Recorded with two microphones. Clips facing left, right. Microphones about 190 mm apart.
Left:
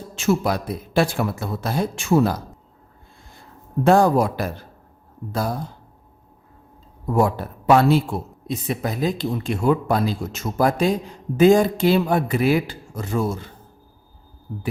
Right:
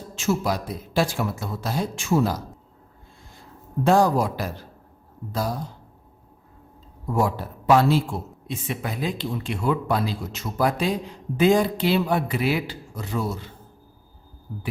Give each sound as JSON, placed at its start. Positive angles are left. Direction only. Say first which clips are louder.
{"t": 0.2, "sound": "speech", "louder": "left 3 dB", "side_deg": 60}
{"t": 3.8, "sound": "speech", "louder": "left 3 dB", "side_deg": 55}
{"t": 7.1, "sound": "speech", "louder": "left 4 dB", "side_deg": 55}
{"t": 8.4, "sound": "speech", "louder": "left 5 dB", "side_deg": 40}